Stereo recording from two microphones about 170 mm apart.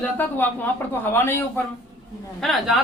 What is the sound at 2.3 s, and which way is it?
Speech, centre (ahead or behind).